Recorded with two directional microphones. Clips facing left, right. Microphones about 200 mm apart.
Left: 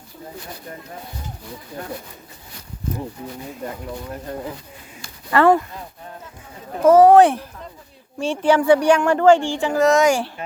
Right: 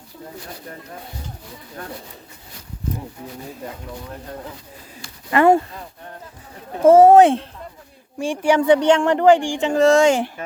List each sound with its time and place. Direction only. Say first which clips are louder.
5.3 s speech: right 1 dB; 20° right (ahead or behind)
6.8 s speech: right 1 dB; 25° right (ahead or behind)
8.2 s speech: even; 10° right (ahead or behind)